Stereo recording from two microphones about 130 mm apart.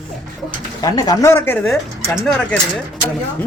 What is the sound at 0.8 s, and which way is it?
Speech, 30° left (ahead or behind).